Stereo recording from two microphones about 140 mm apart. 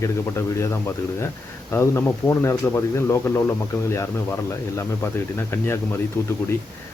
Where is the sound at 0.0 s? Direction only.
20° left (ahead or behind).